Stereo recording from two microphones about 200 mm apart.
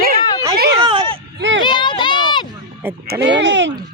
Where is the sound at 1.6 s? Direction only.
25° left (ahead or behind).